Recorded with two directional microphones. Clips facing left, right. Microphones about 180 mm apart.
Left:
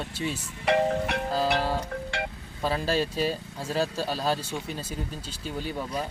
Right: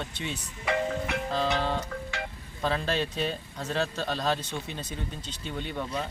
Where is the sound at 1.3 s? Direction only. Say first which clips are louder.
Left 2 dB; 5° left (ahead or behind).